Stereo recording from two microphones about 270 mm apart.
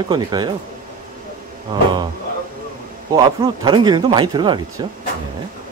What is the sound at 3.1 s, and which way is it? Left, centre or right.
Speech, centre.